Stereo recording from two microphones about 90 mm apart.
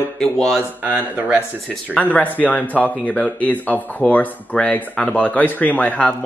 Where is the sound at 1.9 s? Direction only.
15° left (ahead or behind).